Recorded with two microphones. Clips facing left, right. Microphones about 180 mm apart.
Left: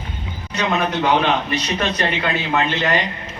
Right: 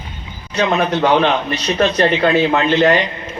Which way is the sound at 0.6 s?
50° right (ahead or behind).